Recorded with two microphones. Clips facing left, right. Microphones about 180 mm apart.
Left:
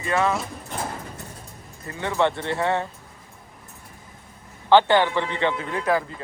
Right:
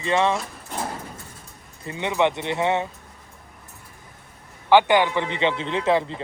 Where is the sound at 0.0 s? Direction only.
25° right (ahead or behind).